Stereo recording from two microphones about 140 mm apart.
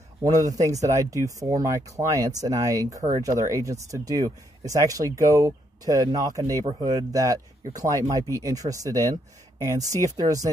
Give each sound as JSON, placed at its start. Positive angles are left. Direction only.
{"t": 0.2, "sound": "speech", "side_deg": -25}
{"t": 6.6, "sound": "speech", "side_deg": -40}
{"t": 7.1, "sound": "speech", "side_deg": -25}